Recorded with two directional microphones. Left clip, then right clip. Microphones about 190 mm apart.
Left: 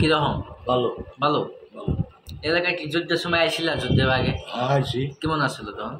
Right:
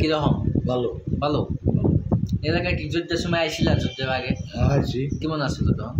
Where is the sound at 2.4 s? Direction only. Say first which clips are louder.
Left 4 dB; 15° right (ahead or behind).